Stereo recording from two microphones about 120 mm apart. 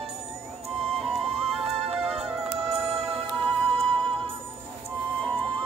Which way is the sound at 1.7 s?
55° right (ahead or behind).